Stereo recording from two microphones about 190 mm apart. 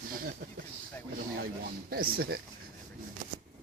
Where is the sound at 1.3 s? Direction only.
50° right (ahead or behind).